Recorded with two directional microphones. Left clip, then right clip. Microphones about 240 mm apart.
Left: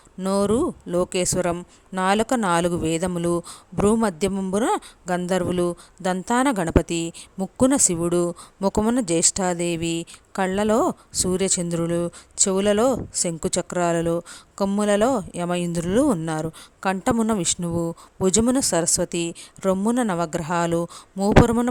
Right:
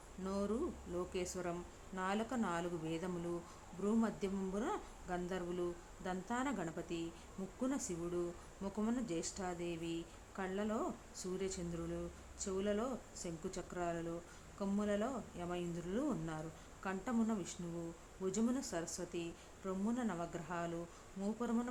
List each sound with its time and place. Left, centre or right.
0.2 s speech: left